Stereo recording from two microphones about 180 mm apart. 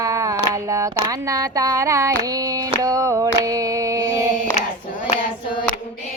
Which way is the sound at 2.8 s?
15° right (ahead or behind).